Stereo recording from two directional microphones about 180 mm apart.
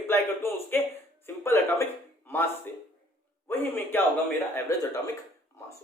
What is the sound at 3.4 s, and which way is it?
A man's voice, 10° left (ahead or behind).